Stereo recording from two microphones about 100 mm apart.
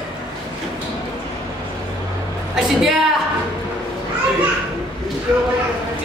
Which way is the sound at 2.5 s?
5° right (ahead or behind).